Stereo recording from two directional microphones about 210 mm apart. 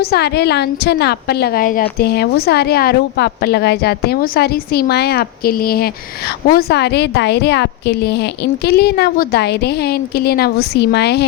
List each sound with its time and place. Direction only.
0.0 s a woman's voice: 50° left (ahead or behind)